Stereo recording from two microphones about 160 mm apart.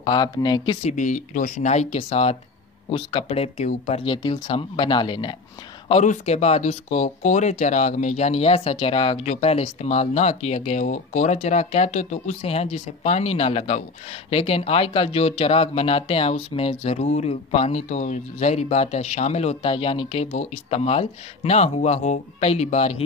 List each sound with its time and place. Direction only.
0.0 s speech: 30° left (ahead or behind)
0.8 s speech: 50° left (ahead or behind); by 5.3 s 30° left (ahead or behind)
5.9 s speech: 40° left (ahead or behind)